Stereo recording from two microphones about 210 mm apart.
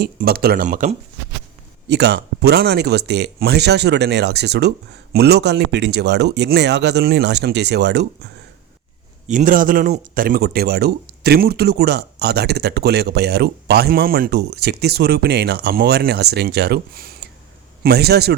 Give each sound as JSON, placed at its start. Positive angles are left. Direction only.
{"t": 0.0, "sound": "speech", "side_deg": -45}
{"t": 1.9, "sound": "speech", "side_deg": -55}
{"t": 9.2, "sound": "speech", "side_deg": -40}